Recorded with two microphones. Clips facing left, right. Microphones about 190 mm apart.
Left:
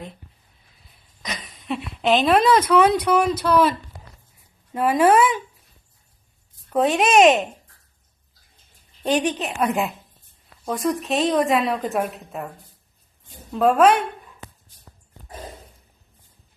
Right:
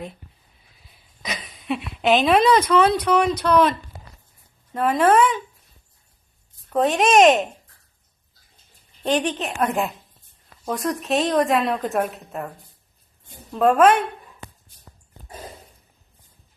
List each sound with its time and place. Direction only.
1.2 s speech: centre (ahead or behind)
6.7 s speech: centre (ahead or behind)
9.0 s speech: 5° left (ahead or behind)
13.5 s speech: centre (ahead or behind)